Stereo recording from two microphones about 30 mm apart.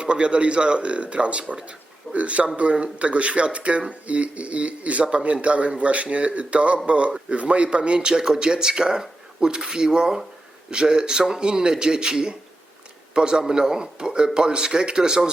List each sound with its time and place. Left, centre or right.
0.0 s a man's voice: right
7.8 s a man's voice: right